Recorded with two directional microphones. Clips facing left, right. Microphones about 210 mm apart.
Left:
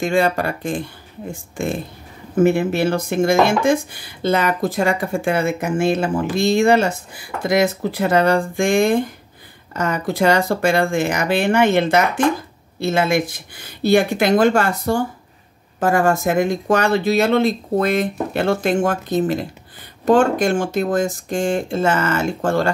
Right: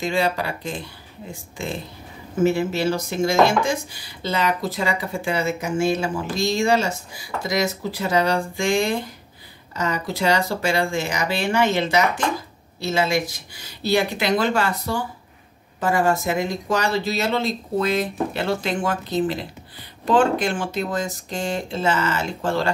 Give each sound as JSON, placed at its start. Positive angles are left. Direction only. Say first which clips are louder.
{"t": 0.0, "sound": "speech", "louder": "left 5 dB", "side_deg": 50}